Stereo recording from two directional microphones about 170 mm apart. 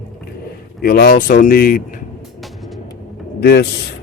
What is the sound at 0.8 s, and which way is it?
Speech, 60° left (ahead or behind).